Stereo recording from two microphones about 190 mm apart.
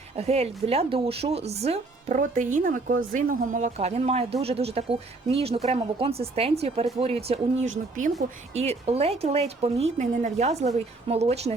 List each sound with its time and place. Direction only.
0.2 s a woman's voice: 35° right (ahead or behind)
8.5 s a woman's voice: 35° right (ahead or behind)